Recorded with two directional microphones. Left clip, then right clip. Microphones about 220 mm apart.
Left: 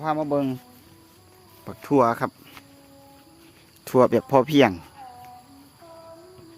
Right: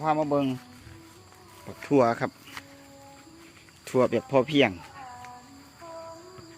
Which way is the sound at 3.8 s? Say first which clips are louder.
Left 6 dB; 30° left (ahead or behind).